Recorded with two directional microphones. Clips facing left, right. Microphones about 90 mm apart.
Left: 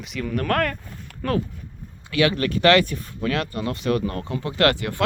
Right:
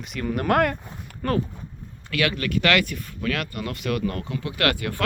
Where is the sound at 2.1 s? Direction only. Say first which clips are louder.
Left 3 dB; 25° left (ahead or behind).